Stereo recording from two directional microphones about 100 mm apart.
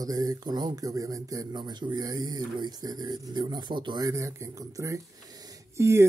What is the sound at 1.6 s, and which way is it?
Speech, 50° right (ahead or behind).